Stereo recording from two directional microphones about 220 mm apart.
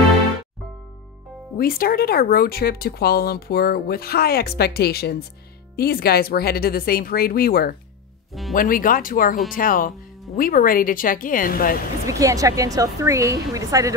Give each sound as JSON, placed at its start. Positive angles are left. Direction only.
{"t": 1.6, "sound": "speech", "side_deg": 40}
{"t": 12.1, "sound": "a woman's voice", "side_deg": -15}